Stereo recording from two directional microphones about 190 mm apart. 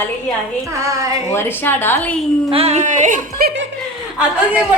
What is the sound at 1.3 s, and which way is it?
Speech, 10° left (ahead or behind).